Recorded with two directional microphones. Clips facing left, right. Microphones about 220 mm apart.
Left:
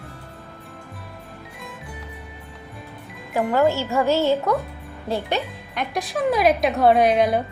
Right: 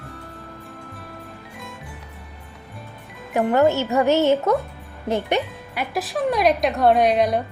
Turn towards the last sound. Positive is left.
turn(degrees=0)  # may be behind; listen again after turning